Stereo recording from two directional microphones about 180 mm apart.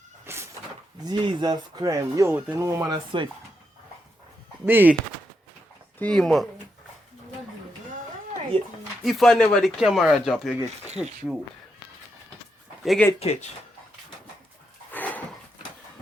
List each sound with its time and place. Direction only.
0.3 s cat: 15° right (ahead or behind)
1.0 s speech: 25° right (ahead or behind)
4.6 s speech: 10° right (ahead or behind)
6.0 s speech: 5° left (ahead or behind)
8.5 s speech: 35° right (ahead or behind)
9.0 s speech: centre (ahead or behind)
12.8 s speech: centre (ahead or behind)
13.1 s speech: 35° left (ahead or behind)
14.9 s dog: 10° left (ahead or behind)